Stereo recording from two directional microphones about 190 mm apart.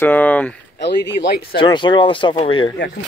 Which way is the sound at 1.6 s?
25° left (ahead or behind).